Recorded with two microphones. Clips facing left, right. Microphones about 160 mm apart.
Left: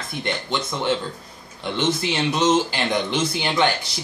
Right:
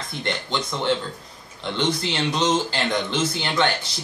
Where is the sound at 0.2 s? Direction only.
10° left (ahead or behind).